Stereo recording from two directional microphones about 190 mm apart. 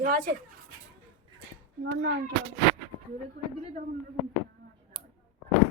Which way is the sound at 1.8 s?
80° right.